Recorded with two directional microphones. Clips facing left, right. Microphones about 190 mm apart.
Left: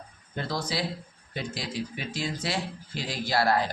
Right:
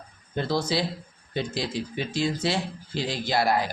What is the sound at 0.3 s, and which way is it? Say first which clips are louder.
A man's voice: right 5 dB; 25° right (ahead or behind).